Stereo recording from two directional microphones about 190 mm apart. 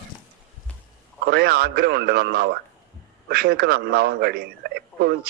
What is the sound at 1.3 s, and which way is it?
A man's voice, 55° right (ahead or behind).